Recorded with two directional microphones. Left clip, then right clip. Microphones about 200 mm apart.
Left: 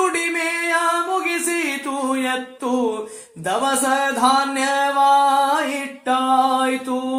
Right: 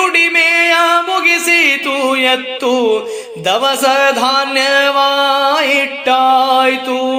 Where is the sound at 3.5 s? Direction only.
30° right (ahead or behind).